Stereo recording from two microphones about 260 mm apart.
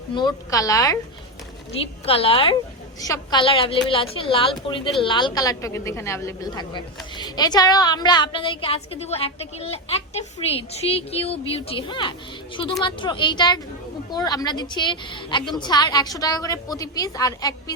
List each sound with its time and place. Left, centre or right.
0.1 s a woman's voice: centre